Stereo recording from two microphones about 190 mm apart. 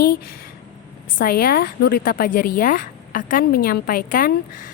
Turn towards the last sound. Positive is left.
turn(degrees=50)  # may be behind; listen again after turning